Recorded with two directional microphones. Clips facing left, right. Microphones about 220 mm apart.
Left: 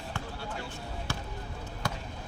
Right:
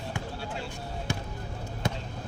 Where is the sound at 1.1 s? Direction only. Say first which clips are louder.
Right 3 dB; 15° right (ahead or behind).